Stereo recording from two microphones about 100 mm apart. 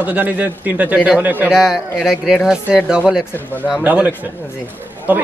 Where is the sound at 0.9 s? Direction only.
5° right (ahead or behind).